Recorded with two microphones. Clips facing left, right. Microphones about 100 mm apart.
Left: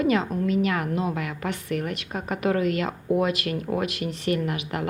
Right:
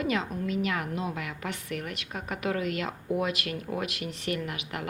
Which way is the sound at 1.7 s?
40° left (ahead or behind).